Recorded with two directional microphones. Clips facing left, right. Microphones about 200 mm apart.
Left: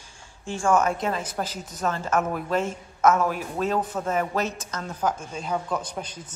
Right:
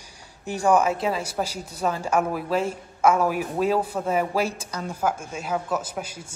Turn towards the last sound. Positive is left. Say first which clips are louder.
# right 2 dB
turn(degrees=-5)  # may be behind; listen again after turning